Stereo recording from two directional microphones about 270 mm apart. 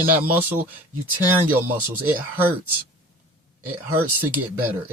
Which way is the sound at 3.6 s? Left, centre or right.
Centre.